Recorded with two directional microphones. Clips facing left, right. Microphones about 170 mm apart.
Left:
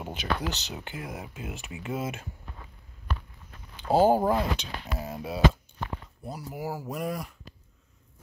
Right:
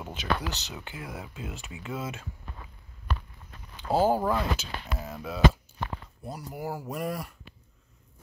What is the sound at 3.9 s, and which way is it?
Speech, 25° left (ahead or behind).